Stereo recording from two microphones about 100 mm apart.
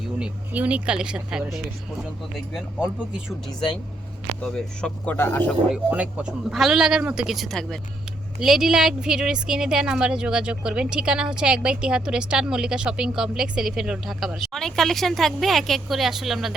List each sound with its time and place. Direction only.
0.2 s speech: 15° right (ahead or behind)
2.5 s speech: centre (ahead or behind)
4.5 s speech: 10° left (ahead or behind)
5.1 s speech: 25° left (ahead or behind)
5.7 s speech: 15° right (ahead or behind)
6.5 s speech: 5° right (ahead or behind)